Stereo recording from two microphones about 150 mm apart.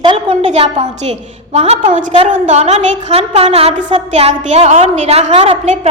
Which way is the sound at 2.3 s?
50° right (ahead or behind).